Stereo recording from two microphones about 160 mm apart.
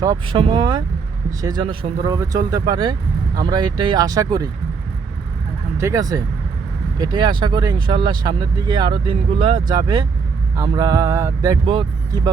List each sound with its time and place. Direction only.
0.3 s speech: 35° right (ahead or behind)
1.4 s speech: 25° right (ahead or behind)
5.7 s speech: 20° right (ahead or behind)
11.6 s speech: 35° right (ahead or behind)